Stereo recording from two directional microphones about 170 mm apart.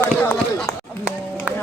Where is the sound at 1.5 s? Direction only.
10° right (ahead or behind).